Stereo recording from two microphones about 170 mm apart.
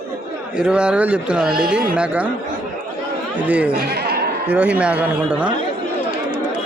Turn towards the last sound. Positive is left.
turn(degrees=-5)  # may be behind; listen again after turning